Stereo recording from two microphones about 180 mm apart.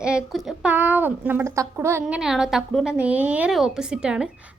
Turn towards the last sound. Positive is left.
turn(degrees=-5)  # may be behind; listen again after turning